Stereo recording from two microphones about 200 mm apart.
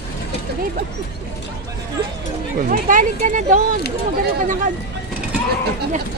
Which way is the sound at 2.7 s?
40° right (ahead or behind).